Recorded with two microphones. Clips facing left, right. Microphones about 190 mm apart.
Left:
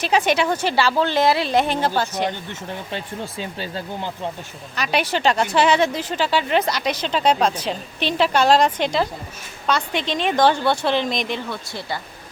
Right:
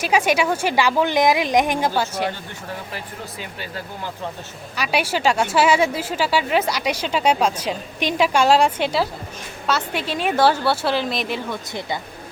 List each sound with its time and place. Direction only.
0.0 s speech: 10° right (ahead or behind)
2.9 s speech: 30° left (ahead or behind)
4.7 s a woman's voice: 10° right (ahead or behind)
11.5 s speech: 20° right (ahead or behind)